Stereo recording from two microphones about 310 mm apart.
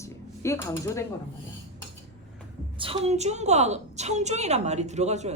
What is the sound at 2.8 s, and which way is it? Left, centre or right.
A woman's voice, centre.